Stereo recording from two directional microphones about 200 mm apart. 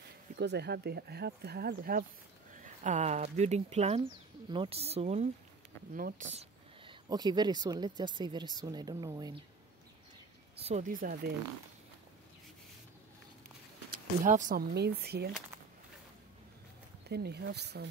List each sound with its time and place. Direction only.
0.4 s speech: 55° right (ahead or behind); by 9.4 s 20° right (ahead or behind)
10.6 s speech: 35° right (ahead or behind)
13.8 s speech: 45° right (ahead or behind)
17.1 s speech: 55° right (ahead or behind)